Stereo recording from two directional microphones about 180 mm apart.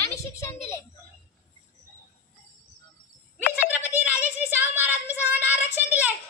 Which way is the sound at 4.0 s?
10° right (ahead or behind).